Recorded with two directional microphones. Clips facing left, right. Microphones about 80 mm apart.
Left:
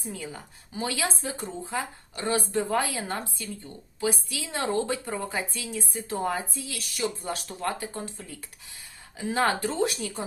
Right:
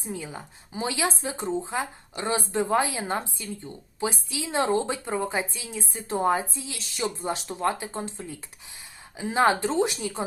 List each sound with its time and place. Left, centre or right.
0.0 s speech: right
9.1 s speech: centre